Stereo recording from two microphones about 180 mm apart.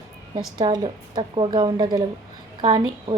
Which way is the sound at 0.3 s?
25° right (ahead or behind).